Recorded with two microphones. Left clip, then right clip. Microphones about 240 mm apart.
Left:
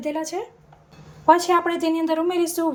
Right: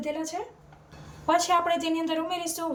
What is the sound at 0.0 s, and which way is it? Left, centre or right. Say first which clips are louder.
A woman's voice: left 5 dB; centre.